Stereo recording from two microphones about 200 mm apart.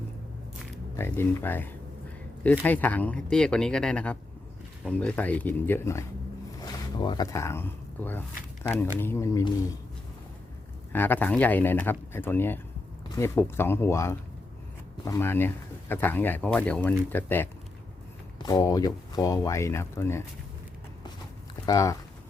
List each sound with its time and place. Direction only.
0.9 s speech: 10° left (ahead or behind)
10.9 s speech: 10° left (ahead or behind)
21.7 s speech: 15° left (ahead or behind)